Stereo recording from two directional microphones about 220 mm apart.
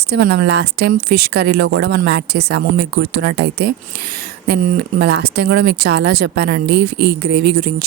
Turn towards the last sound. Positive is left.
turn(degrees=-45)  # may be behind; listen again after turning